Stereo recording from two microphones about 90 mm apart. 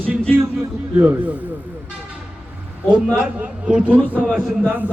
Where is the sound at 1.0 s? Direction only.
20° right (ahead or behind).